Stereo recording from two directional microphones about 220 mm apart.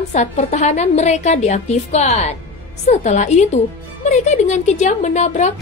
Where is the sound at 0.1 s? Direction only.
35° left (ahead or behind).